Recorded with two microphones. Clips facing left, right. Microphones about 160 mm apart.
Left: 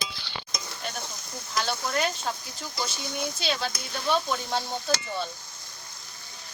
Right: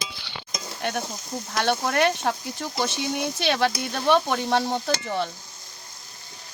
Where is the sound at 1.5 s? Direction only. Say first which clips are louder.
Right 5 dB; 65° right (ahead or behind).